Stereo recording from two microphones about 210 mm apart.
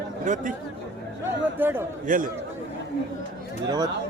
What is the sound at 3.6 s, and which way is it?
Speech, 20° right (ahead or behind).